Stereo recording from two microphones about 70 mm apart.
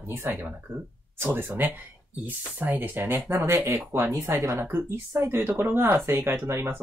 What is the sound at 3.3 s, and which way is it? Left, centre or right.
Speech, right.